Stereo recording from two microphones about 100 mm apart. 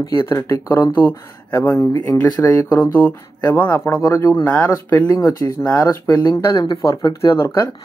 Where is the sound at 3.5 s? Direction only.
15° left (ahead or behind).